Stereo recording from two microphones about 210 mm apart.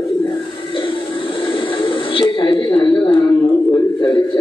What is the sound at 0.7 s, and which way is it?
Television, 25° left (ahead or behind).